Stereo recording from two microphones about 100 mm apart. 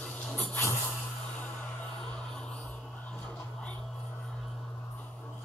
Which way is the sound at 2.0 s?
10° left (ahead or behind).